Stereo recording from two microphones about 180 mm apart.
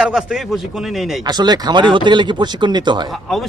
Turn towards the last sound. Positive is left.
turn(degrees=0)  # may be behind; listen again after turning